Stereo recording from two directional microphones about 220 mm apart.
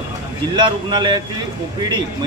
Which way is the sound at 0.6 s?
20° right (ahead or behind).